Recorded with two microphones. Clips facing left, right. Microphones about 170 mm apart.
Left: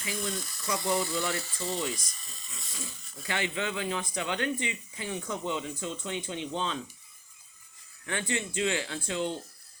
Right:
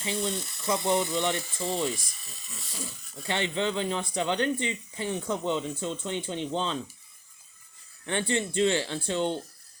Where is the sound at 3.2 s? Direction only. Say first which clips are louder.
Right 4 dB; 30° right (ahead or behind).